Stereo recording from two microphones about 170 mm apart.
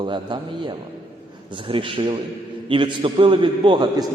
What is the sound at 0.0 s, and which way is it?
A man's voice, 25° right (ahead or behind).